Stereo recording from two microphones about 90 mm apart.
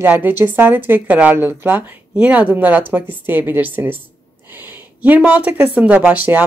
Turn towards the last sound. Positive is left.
turn(degrees=-20)  # may be behind; listen again after turning